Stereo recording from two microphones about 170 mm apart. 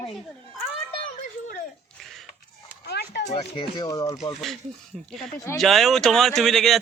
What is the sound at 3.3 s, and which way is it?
Speech, 25° left (ahead or behind).